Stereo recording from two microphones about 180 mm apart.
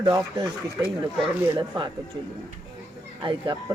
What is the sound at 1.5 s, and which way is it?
Speech, 25° right (ahead or behind).